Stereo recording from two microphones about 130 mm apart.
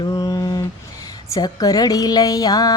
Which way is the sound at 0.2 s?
30° left (ahead or behind).